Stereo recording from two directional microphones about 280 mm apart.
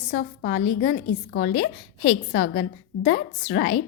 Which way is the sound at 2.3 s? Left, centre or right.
Left.